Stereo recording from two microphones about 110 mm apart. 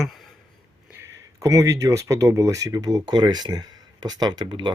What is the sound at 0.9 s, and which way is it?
Speech, 25° right (ahead or behind).